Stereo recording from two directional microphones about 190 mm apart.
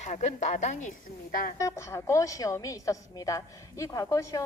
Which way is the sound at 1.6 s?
15° left (ahead or behind).